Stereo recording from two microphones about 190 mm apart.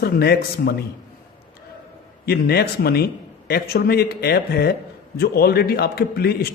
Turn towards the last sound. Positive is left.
turn(degrees=55)  # may be behind; listen again after turning